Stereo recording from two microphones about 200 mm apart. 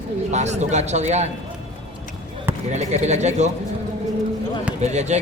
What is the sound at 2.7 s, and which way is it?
Speech, 35° right (ahead or behind).